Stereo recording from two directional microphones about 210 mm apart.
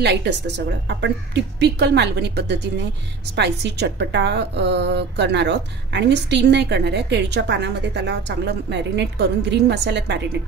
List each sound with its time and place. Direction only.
0.0 s a woman's voice: 55° right (ahead or behind)